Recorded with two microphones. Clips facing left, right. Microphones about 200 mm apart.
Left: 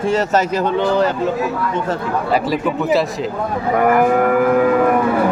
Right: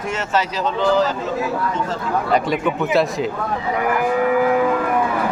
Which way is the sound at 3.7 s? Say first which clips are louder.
Left 6 dB; 50° left (ahead or behind).